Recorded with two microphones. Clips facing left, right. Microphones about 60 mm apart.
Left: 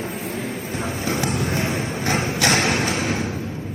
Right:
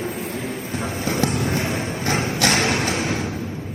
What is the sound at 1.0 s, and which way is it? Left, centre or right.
Vehicle, left.